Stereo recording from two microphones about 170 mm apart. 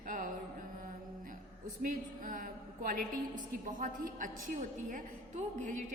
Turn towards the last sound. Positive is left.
turn(degrees=-45)  # may be behind; listen again after turning